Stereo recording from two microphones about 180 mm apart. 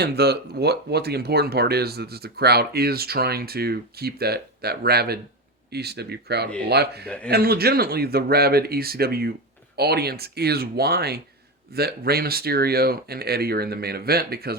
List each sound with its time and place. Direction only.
0.0 s speech: 65° right (ahead or behind)